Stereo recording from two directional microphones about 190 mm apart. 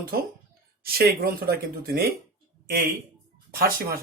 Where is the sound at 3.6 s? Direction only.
50° right (ahead or behind).